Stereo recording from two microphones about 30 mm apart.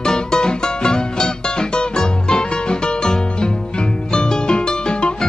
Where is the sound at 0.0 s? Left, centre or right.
Left.